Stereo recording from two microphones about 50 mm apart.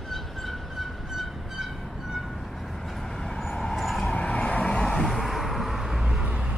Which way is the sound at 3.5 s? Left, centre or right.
Centre.